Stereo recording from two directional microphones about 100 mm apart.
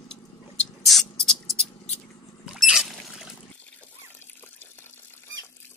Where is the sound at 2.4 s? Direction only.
5° right (ahead or behind).